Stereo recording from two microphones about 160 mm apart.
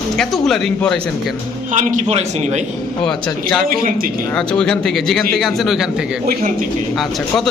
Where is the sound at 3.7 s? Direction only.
60° right (ahead or behind).